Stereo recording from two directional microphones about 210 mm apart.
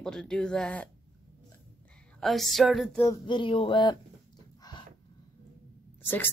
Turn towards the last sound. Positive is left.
turn(degrees=10)  # may be behind; listen again after turning